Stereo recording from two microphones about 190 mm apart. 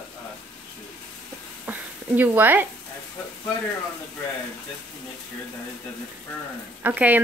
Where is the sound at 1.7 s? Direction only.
10° right (ahead or behind).